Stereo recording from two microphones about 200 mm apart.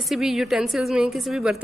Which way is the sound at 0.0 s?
Centre (ahead or behind).